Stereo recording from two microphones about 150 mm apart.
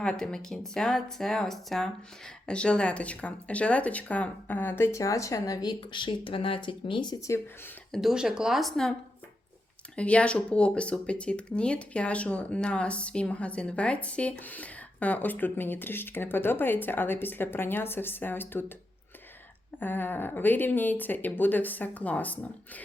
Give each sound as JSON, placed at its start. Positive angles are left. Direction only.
{"t": 0.0, "sound": "speech", "side_deg": 5}
{"t": 7.9, "sound": "speech", "side_deg": -5}
{"t": 19.8, "sound": "speech", "side_deg": 15}